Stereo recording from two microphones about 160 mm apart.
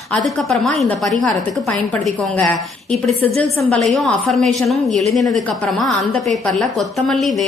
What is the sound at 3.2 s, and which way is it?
Speech, 40° right (ahead or behind).